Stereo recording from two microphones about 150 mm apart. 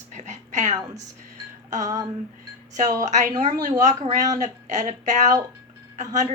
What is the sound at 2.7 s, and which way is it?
A woman's voice, 55° right (ahead or behind).